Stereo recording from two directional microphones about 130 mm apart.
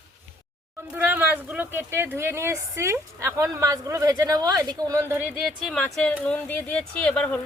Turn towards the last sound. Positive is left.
turn(degrees=10)  # may be behind; listen again after turning